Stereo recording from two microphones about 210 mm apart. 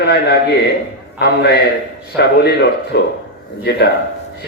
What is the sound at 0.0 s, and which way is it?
A man's voice, 50° left (ahead or behind).